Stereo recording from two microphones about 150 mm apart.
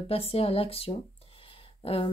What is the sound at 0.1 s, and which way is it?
Speech, 40° left (ahead or behind).